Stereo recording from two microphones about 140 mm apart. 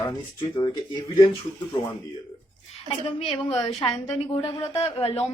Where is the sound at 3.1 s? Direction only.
45° left (ahead or behind).